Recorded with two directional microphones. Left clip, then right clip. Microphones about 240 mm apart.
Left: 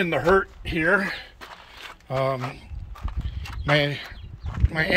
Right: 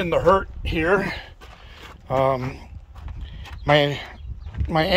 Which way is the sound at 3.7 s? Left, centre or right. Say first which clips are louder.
Right 4 dB; centre.